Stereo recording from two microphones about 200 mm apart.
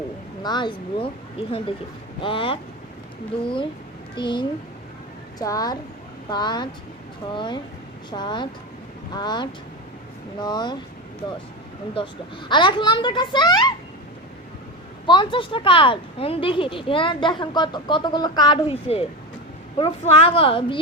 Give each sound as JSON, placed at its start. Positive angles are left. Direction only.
{"t": 0.4, "sound": "speech", "side_deg": 20}
{"t": 11.9, "sound": "speech", "side_deg": 25}
{"t": 15.0, "sound": "speech", "side_deg": 25}